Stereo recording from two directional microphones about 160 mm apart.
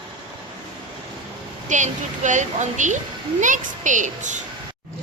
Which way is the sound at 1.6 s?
50° right (ahead or behind).